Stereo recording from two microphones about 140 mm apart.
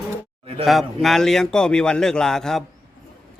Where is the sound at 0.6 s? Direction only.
Centre (ahead or behind).